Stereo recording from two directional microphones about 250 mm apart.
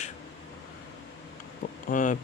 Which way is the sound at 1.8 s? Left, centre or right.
Left.